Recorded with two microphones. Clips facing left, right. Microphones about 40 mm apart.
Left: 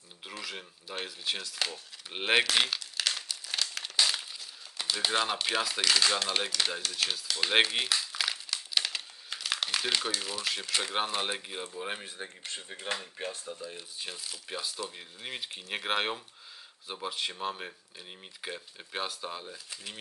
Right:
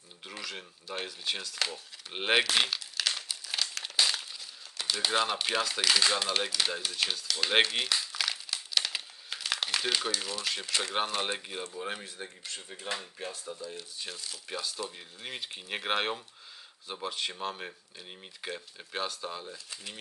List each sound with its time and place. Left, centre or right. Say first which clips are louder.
0.4 s speech: even; centre
11.9 s speech: even; centre
13.6 s speech: even; centre